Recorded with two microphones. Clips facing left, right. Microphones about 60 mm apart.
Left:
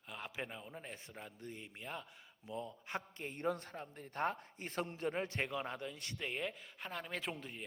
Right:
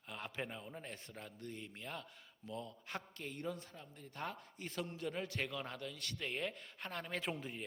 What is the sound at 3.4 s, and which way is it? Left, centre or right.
A man's voice, left.